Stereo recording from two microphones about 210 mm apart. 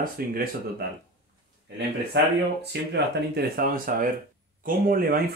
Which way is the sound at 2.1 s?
55° right (ahead or behind).